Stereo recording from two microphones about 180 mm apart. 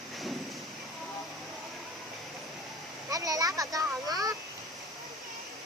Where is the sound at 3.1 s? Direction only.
20° right (ahead or behind).